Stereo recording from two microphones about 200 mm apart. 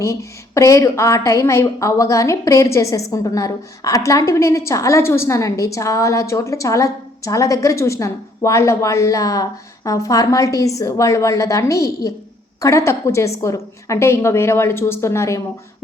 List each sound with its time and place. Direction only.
0.0 s a woman's voice: 15° left (ahead or behind)